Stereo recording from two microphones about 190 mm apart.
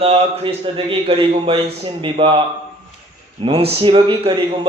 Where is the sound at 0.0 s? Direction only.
30° right (ahead or behind).